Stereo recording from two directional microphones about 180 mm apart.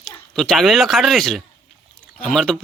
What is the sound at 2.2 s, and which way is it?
Speech, 5° left (ahead or behind).